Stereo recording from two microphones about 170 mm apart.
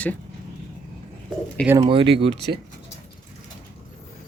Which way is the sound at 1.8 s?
30° right (ahead or behind).